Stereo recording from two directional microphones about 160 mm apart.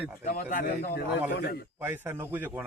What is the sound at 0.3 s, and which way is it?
Speech, 65° left (ahead or behind).